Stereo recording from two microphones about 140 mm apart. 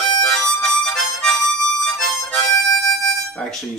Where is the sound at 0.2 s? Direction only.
5° left (ahead or behind).